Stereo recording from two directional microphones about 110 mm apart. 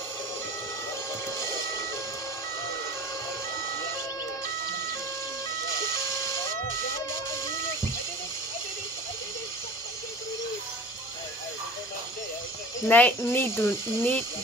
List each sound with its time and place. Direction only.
12.8 s speech: 15° left (ahead or behind)